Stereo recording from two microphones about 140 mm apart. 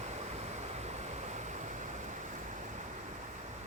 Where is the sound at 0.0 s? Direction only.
50° right (ahead or behind).